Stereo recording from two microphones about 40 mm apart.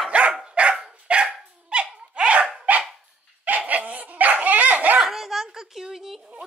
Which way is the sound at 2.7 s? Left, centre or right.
Right.